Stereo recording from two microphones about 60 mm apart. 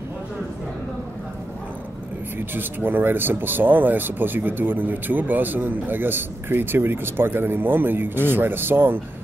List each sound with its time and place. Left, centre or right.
2.3 s speech: right